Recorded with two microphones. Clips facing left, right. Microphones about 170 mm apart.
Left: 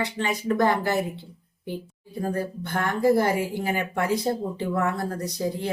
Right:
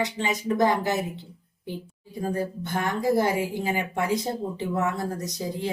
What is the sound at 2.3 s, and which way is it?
Speech, 15° right (ahead or behind).